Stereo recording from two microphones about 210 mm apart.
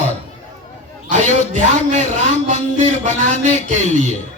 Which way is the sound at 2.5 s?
35° right (ahead or behind).